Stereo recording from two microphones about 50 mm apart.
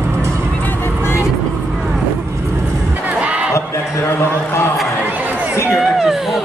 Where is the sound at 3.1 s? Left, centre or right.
Right.